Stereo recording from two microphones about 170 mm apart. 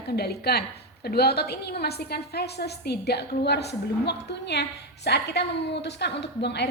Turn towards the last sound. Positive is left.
turn(degrees=80)